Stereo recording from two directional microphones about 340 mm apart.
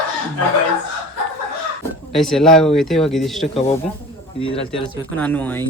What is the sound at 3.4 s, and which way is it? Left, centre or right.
Speech, centre.